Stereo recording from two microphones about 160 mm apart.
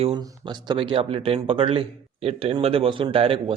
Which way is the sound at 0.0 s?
30° right (ahead or behind).